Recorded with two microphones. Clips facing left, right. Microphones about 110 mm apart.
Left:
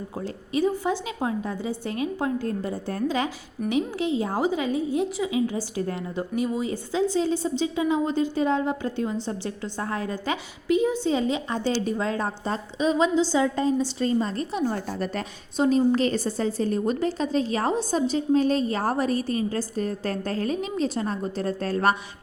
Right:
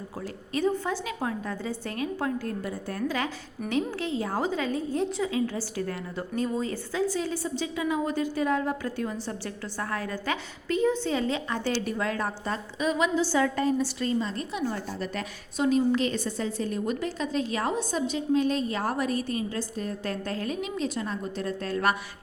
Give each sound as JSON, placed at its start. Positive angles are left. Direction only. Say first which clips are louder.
{"t": 0.5, "sound": "a woman's voice", "louder": "left 3 dB", "side_deg": 15}
{"t": 14.2, "sound": "speech", "louder": "left 4 dB", "side_deg": 40}
{"t": 15.2, "sound": "a woman's voice", "louder": "left 3 dB", "side_deg": 30}